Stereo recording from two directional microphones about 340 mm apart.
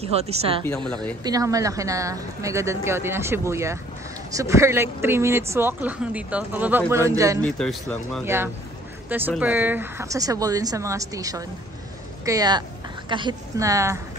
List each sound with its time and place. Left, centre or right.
0.0 s a woman's voice: centre
0.7 s speech: centre
1.2 s a woman's voice: centre
7.4 s a woman's voice: centre